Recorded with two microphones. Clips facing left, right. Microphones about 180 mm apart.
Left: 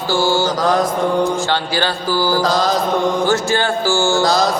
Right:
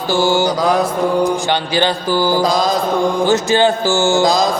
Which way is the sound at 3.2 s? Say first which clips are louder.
Right 4 dB; 20° right (ahead or behind).